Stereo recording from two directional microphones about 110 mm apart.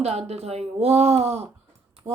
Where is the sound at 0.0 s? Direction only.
75° right (ahead or behind).